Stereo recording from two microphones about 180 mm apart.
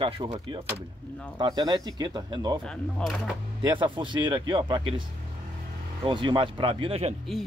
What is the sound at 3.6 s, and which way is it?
Speech, 25° right (ahead or behind).